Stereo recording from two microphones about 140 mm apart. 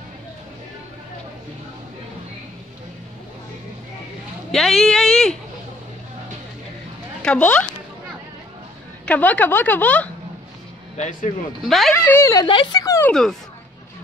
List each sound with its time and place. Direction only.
4.5 s speech: centre (ahead or behind)
7.2 s a woman's voice: 10° left (ahead or behind)
9.0 s a woman's voice: 10° left (ahead or behind)
11.0 s speech: 60° left (ahead or behind)
11.6 s speech: centre (ahead or behind)
11.9 s a woman's voice: 15° left (ahead or behind)
12.4 s speech: 40° left (ahead or behind)
12.8 s speech: 20° left (ahead or behind)
13.1 s speech: 5° left (ahead or behind)